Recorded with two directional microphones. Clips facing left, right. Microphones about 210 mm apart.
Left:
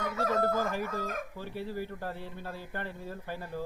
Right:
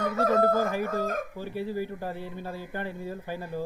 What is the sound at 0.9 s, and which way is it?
Speech, 35° right (ahead or behind).